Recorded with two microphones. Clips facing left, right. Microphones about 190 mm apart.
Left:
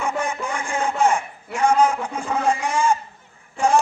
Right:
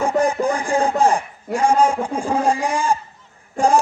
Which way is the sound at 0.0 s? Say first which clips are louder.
Right 7 dB; 35° right (ahead or behind).